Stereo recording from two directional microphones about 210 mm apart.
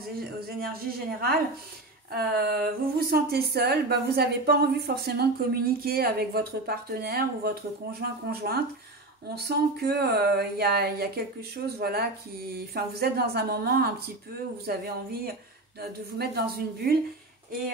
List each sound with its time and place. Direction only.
0.6 s speech: 45° right (ahead or behind)